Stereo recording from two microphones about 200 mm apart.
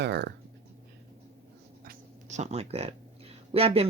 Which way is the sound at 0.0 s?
55° right (ahead or behind).